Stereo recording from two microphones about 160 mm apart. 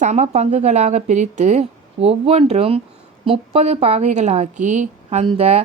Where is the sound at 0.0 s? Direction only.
45° right (ahead or behind).